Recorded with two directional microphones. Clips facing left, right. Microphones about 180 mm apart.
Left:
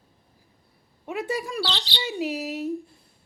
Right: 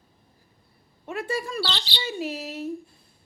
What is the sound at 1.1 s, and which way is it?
Speech, 15° left (ahead or behind).